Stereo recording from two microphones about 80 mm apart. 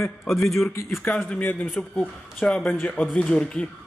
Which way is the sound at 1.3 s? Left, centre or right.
Centre.